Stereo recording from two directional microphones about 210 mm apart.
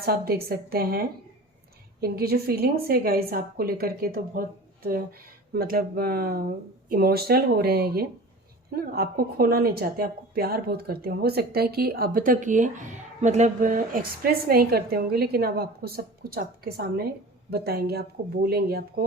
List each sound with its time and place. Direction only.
0.0 s a woman's voice: 45° right (ahead or behind)